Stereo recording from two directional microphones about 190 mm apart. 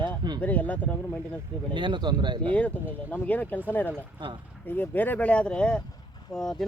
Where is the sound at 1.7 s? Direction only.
25° right (ahead or behind).